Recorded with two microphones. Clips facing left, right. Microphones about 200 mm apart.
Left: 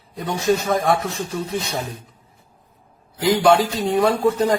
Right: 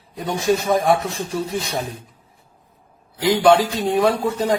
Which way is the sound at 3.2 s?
Centre (ahead or behind).